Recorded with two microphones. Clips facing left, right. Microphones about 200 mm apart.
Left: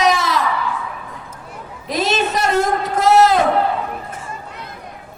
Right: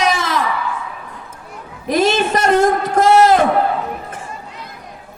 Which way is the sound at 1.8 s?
50° right (ahead or behind).